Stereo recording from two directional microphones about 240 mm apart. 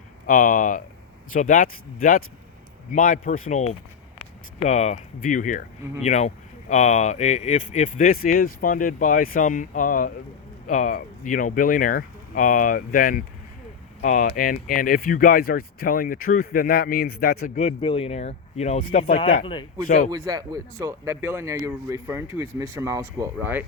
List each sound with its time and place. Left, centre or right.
0.3 s speech: left
20.1 s speech: centre